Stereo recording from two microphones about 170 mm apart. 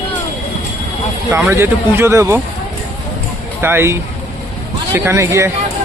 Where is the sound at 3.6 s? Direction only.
15° right (ahead or behind).